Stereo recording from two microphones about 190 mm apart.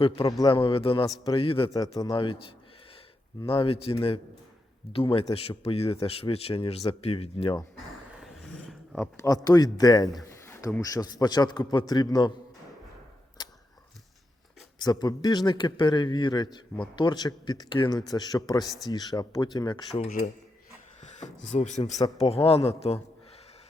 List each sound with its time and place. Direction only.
0.0 s a man's voice: 30° left (ahead or behind)
3.4 s a man's voice: 30° left (ahead or behind)
8.2 s a sound: 5° left (ahead or behind)
9.2 s a man's voice: 20° left (ahead or behind)
13.4 s a sound: 20° left (ahead or behind)
14.8 s a man's voice: 20° left (ahead or behind)
18.6 s speech: centre (ahead or behind)
18.9 s a man's voice: 20° left (ahead or behind)
20.1 s speech: 45° left (ahead or behind)
21.5 s speech: 40° left (ahead or behind)